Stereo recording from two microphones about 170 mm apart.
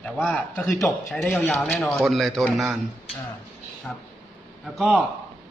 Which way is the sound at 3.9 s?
5° left (ahead or behind).